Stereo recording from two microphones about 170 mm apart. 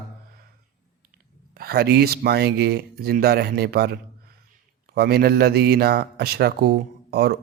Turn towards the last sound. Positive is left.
turn(degrees=-70)  # may be behind; listen again after turning